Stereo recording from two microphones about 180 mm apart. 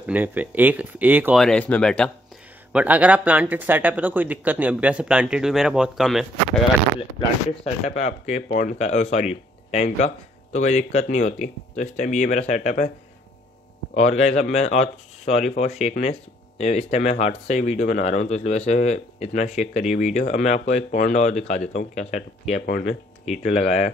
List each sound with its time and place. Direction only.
0.0 s speech: 10° right (ahead or behind)
1.4 s speech: 5° left (ahead or behind)
2.7 s speech: 10° right (ahead or behind)
7.6 s speech: 40° left (ahead or behind)
13.9 s speech: 40° left (ahead or behind)